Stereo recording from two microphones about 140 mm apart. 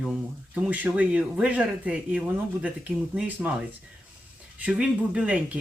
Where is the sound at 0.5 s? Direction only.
10° right (ahead or behind).